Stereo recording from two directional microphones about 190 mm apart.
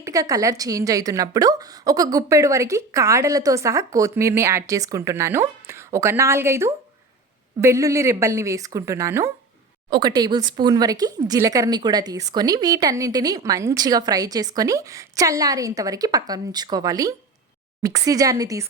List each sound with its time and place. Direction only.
0.0 s a woman's voice: 15° right (ahead or behind)